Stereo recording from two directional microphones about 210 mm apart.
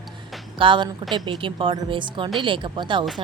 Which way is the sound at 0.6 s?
25° right (ahead or behind).